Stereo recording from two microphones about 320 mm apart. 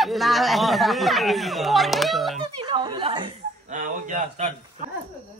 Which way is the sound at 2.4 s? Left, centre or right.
Centre.